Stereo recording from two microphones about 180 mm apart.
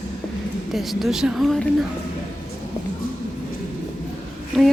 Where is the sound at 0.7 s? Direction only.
Centre (ahead or behind).